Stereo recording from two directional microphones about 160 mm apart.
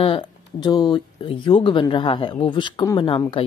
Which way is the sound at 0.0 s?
30° left (ahead or behind).